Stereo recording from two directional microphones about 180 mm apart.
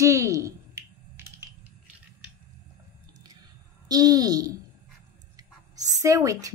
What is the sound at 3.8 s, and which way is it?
A woman's voice, 20° right (ahead or behind).